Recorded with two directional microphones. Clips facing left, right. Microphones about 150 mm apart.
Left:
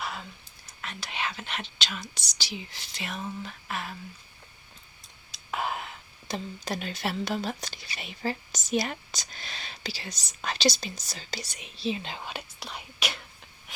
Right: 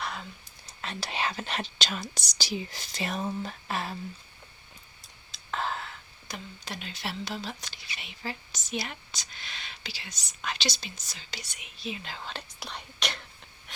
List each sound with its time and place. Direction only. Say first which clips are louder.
0.0 s a sound: even; centre (ahead or behind)
0.8 s speech: right 2 dB; 35° right (ahead or behind)
5.5 s whispering: left 1 dB; 10° left (ahead or behind)
6.7 s speech: left 6 dB; 50° left (ahead or behind); by 12.1 s 30° left (ahead or behind)
12.1 s speech: left 2 dB; 10° left (ahead or behind)
13.7 s filing: even; 5° left (ahead or behind)